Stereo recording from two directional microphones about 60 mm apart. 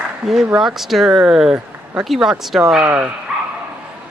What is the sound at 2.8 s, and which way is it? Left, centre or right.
Speech, right.